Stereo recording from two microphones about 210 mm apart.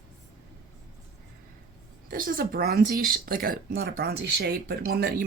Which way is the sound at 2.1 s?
40° right (ahead or behind).